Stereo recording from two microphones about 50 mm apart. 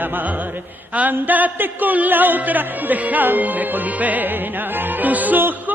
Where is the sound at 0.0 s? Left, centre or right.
Right.